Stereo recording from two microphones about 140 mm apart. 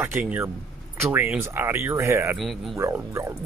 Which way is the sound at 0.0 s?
10° right (ahead or behind).